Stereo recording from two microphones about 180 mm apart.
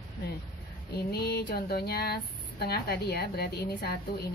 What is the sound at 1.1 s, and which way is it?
A woman's voice, 65° left (ahead or behind).